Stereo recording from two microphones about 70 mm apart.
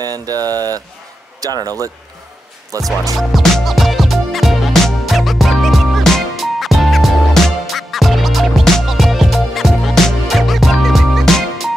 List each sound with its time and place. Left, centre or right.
0.0 s mantra: right
1.4 s speech: right
2.7 s mantra: right
3.2 s music: centre